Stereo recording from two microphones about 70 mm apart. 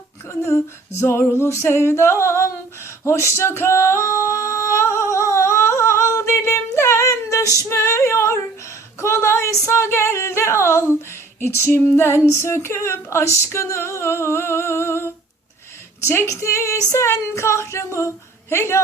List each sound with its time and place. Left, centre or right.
0.3 s female singing: left
16.0 s speech: left